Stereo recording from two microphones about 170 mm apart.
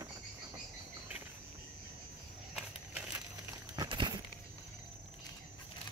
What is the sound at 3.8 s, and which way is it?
Crumpling, 25° right (ahead or behind).